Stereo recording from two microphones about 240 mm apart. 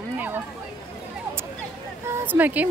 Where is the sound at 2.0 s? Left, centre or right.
Centre.